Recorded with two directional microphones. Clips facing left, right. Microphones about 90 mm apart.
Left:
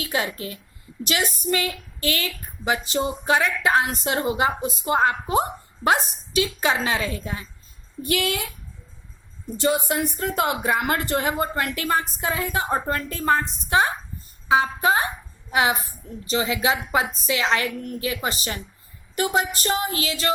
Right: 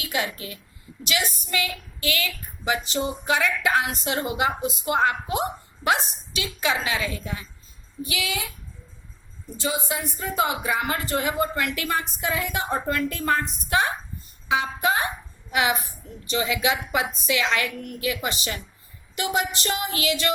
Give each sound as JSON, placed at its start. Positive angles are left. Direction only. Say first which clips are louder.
{"t": 0.0, "sound": "a woman's voice", "louder": "left 2 dB", "side_deg": 40}
{"t": 8.0, "sound": "a woman's voice", "louder": "left 6 dB", "side_deg": 55}
{"t": 9.6, "sound": "a woman's voice", "louder": "left 6 dB", "side_deg": 70}